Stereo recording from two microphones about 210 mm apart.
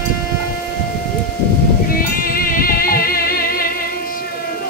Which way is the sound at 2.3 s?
45° left (ahead or behind).